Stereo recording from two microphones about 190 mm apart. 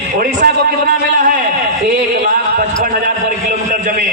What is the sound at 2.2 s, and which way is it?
Speech, 45° right (ahead or behind).